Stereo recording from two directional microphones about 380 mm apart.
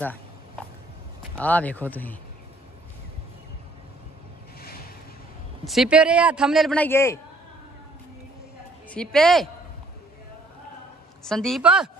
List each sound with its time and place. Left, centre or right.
1.3 s a man's voice: centre
4.6 s a sound: left
5.7 s a man's voice: centre
8.9 s a man's voice: centre
11.2 s a man's voice: centre